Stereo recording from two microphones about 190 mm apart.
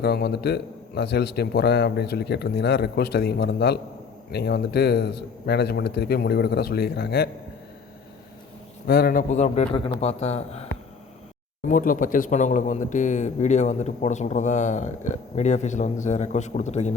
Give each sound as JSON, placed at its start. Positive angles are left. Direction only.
{"t": 0.0, "sound": "a man's voice", "side_deg": 55}
{"t": 8.9, "sound": "speech", "side_deg": 50}
{"t": 11.7, "sound": "speech", "side_deg": 45}